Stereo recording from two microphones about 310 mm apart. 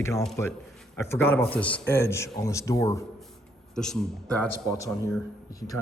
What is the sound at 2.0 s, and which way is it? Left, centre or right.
Speech, centre.